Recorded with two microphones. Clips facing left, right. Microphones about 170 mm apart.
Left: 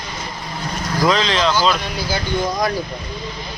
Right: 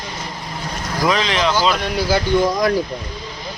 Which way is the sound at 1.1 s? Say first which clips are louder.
Even; 15° right (ahead or behind).